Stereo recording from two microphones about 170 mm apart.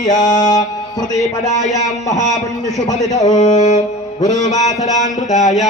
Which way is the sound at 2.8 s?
20° left (ahead or behind).